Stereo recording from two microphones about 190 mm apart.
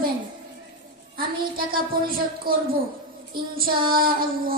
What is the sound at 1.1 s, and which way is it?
A woman's voice, 50° right (ahead or behind).